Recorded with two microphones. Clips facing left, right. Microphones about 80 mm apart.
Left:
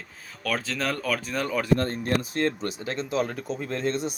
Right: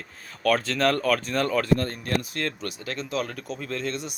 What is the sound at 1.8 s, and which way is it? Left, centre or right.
Speech, left.